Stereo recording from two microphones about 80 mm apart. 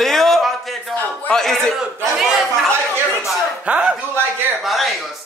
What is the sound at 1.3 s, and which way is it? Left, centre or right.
Speech, centre.